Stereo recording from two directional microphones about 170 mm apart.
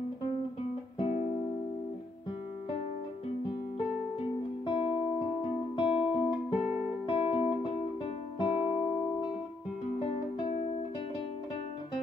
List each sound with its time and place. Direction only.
0.9 s music: 40° left (ahead or behind)
4.6 s music: 35° left (ahead or behind)
6.5 s music: 5° right (ahead or behind)
7.1 s music: 35° left (ahead or behind)
10.4 s music: 35° left (ahead or behind)